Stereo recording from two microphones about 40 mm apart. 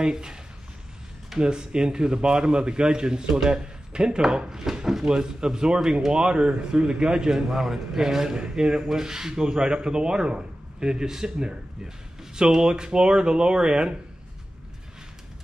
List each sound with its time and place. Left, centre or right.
0.0 s speech: centre
1.4 s a man's voice: right